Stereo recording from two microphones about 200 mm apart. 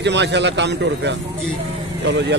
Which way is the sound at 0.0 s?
60° right (ahead or behind).